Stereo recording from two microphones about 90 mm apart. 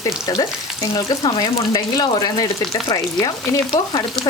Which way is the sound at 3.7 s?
40° left (ahead or behind).